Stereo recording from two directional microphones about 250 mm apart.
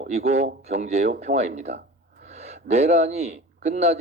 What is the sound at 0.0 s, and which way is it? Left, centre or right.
Speech, right.